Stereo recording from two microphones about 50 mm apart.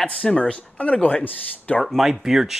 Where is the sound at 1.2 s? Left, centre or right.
Left.